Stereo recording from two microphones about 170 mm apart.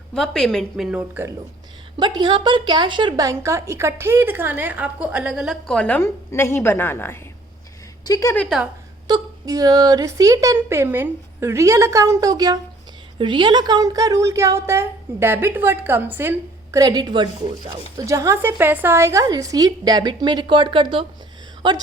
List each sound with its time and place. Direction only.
0.1 s a woman's voice: 5° left (ahead or behind)
2.0 s a woman's voice: 25° right (ahead or behind); by 8.4 s 15° left (ahead or behind)
9.0 s a woman's voice: 25° right (ahead or behind)
16.7 s a woman's voice: 25° right (ahead or behind)